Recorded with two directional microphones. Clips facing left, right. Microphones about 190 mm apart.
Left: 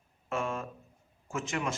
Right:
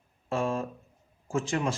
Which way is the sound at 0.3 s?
30° right (ahead or behind).